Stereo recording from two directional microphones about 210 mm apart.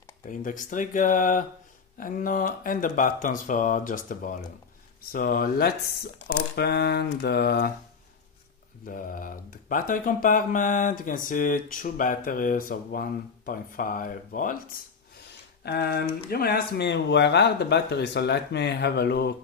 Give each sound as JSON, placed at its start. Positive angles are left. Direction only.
{"t": 0.3, "sound": "speech", "side_deg": 40}
{"t": 8.8, "sound": "speech", "side_deg": 40}